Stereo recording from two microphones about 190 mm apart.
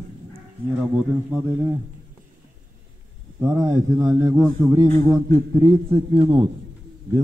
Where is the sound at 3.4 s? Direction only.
15° right (ahead or behind).